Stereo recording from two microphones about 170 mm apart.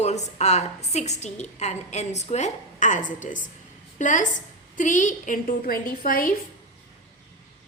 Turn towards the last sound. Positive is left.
turn(degrees=55)  # may be behind; listen again after turning